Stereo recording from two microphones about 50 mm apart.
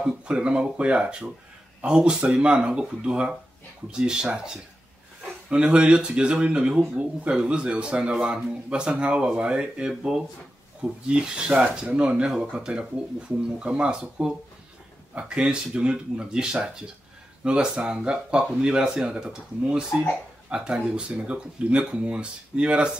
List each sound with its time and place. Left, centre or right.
0.0 s speech: right